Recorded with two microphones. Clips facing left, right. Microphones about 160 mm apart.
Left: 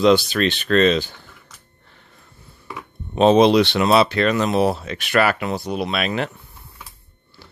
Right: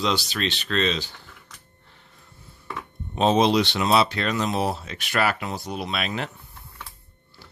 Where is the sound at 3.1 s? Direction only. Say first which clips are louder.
Left 6 dB; 65° left (ahead or behind).